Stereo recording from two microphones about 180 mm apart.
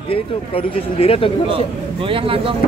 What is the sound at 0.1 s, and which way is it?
Speech, 30° left (ahead or behind).